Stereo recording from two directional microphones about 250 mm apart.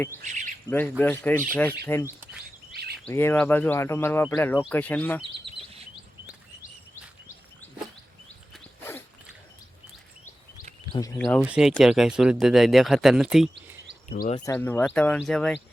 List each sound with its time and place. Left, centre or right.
0.2 s speech: right
0.7 s speech: centre
2.7 s bird vocalization: right
3.1 s speech: centre
8.5 s dog: centre
10.9 s speech: centre
11.2 s speech: centre
14.3 s speech: centre
14.5 s speech: centre